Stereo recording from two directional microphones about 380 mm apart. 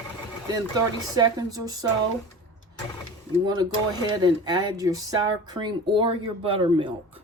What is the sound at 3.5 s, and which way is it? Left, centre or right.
Speech, centre.